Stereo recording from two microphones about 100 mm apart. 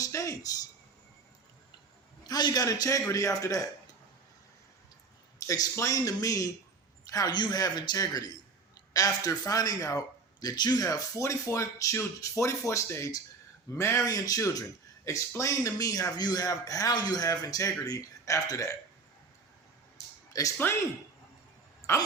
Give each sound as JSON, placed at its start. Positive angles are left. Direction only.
{"t": 0.0, "sound": "speech", "side_deg": 30}
{"t": 2.2, "sound": "a man's voice", "side_deg": 40}
{"t": 5.5, "sound": "a man's voice", "side_deg": 35}
{"t": 10.9, "sound": "a man's voice", "side_deg": 30}
{"t": 20.3, "sound": "a man's voice", "side_deg": 35}
{"t": 21.9, "sound": "speech", "side_deg": 30}